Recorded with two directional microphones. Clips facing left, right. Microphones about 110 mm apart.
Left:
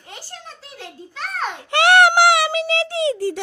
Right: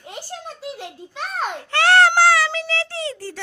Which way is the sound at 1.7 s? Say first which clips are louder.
Left 2 dB; 15° left (ahead or behind).